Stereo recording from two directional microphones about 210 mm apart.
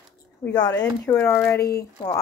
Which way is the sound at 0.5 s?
20° left (ahead or behind).